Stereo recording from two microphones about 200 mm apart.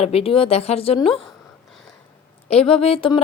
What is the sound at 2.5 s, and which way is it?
Speech, 30° left (ahead or behind).